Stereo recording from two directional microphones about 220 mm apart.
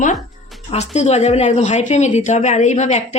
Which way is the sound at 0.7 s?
30° left (ahead or behind).